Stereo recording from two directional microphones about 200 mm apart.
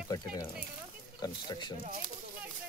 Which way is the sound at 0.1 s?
25° left (ahead or behind).